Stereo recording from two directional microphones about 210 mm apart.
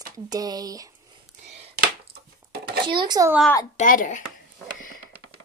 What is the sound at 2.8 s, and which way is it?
Speech, 20° right (ahead or behind).